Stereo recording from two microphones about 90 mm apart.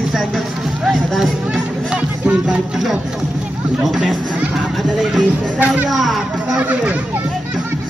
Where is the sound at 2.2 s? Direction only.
15° right (ahead or behind).